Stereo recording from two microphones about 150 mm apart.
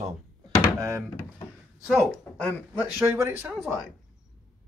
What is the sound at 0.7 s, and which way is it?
Speech, 20° right (ahead or behind).